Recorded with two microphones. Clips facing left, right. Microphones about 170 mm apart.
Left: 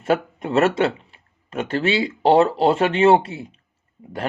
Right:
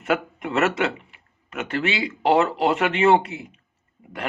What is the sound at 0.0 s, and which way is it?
Speech, 30° left (ahead or behind).